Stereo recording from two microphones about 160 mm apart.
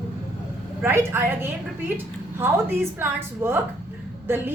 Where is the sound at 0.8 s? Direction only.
15° right (ahead or behind).